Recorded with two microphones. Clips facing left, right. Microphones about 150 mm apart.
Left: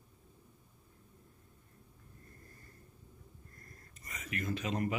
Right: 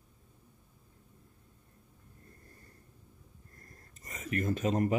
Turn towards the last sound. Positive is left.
turn(degrees=-40)  # may be behind; listen again after turning